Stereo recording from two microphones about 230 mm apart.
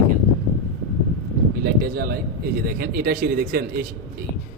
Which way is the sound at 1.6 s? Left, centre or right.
Right.